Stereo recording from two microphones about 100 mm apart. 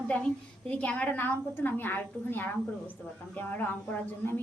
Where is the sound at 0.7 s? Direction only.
15° left (ahead or behind).